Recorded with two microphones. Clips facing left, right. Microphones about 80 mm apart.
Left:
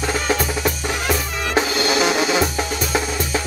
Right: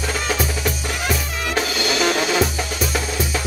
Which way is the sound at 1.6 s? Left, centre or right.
Centre.